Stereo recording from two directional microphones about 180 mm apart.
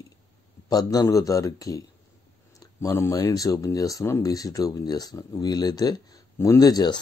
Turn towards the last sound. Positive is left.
turn(degrees=20)  # may be behind; listen again after turning